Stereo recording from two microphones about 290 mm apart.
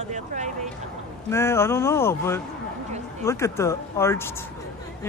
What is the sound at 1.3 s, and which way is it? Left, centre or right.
Speech, centre.